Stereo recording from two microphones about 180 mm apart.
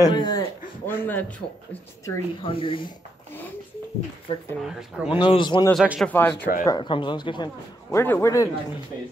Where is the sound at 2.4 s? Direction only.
30° left (ahead or behind).